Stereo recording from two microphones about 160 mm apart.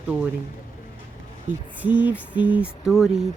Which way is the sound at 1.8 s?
10° right (ahead or behind).